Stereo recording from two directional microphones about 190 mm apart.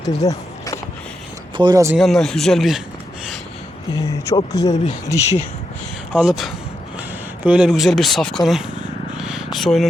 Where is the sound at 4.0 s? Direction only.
15° left (ahead or behind).